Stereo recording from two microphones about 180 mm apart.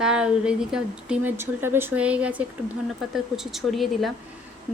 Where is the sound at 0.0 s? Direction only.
5° right (ahead or behind).